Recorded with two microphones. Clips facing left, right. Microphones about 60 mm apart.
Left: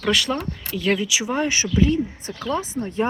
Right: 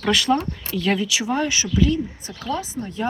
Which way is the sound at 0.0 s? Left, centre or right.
Centre.